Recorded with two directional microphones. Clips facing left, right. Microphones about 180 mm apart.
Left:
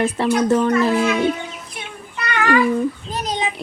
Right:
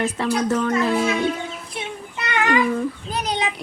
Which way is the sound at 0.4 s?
30° left (ahead or behind).